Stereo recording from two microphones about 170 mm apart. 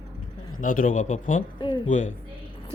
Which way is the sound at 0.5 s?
55° left (ahead or behind).